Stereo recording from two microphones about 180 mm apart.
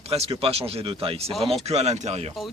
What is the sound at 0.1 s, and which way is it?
Speech, 35° right (ahead or behind).